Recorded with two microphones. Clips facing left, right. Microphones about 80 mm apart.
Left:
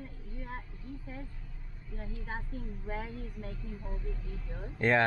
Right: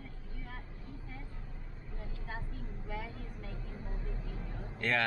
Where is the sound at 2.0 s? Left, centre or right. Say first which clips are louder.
Left 4 dB; left.